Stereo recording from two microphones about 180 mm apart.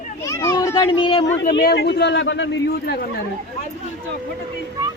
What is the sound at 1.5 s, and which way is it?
Speech, 65° left (ahead or behind).